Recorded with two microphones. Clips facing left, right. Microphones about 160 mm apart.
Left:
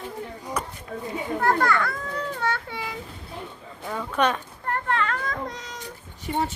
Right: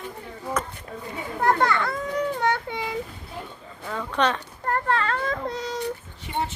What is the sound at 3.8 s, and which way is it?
Speech, 10° left (ahead or behind).